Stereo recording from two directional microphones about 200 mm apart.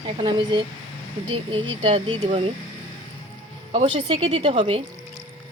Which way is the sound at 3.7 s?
25° right (ahead or behind).